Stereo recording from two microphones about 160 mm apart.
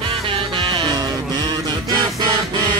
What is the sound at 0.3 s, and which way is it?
Music, 30° right (ahead or behind).